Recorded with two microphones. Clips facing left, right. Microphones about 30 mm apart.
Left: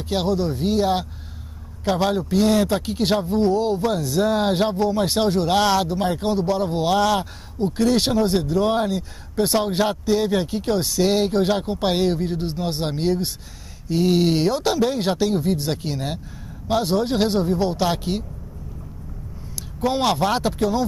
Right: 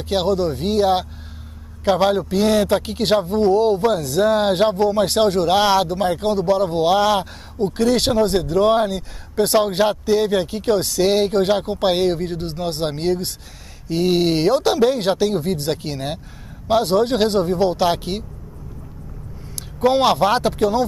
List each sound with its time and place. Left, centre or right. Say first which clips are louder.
0.0 s speech: right 3 dB; centre
19.8 s speech: right 5 dB; centre